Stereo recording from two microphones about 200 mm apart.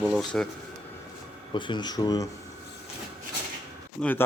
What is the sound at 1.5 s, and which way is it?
Speech, 25° left (ahead or behind).